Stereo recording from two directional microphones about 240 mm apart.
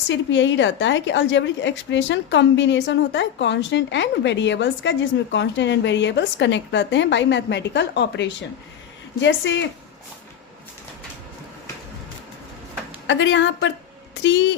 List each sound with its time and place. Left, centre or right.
0.1 s a woman's voice: left
13.1 s a woman's voice: left